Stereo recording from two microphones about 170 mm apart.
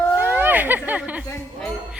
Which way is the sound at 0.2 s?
10° right (ahead or behind).